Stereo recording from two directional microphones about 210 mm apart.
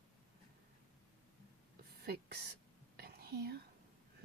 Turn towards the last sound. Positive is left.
turn(degrees=-45)  # may be behind; listen again after turning